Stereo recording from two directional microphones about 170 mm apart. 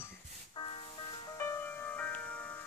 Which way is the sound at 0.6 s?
30° left (ahead or behind).